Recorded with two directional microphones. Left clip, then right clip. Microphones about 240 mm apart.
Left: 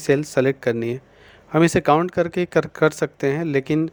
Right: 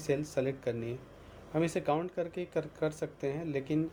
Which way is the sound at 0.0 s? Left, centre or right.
Left.